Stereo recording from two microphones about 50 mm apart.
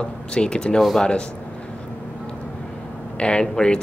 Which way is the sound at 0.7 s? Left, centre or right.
Centre.